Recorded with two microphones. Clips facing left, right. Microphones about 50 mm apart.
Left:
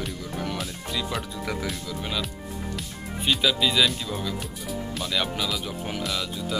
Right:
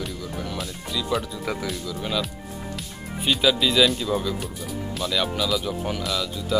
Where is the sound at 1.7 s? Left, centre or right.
Centre.